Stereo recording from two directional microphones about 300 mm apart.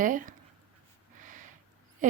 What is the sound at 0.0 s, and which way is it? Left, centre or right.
Speech, right.